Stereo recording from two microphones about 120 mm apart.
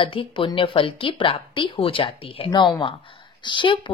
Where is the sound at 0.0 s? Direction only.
50° left (ahead or behind).